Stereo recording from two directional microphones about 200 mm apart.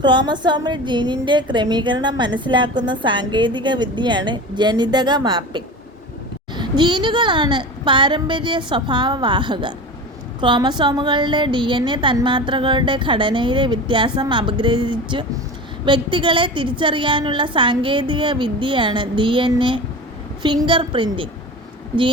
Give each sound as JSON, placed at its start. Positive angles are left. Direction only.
{"t": 0.0, "sound": "a woman's voice", "side_deg": -20}